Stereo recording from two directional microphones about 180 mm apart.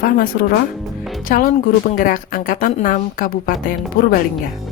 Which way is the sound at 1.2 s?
50° left (ahead or behind).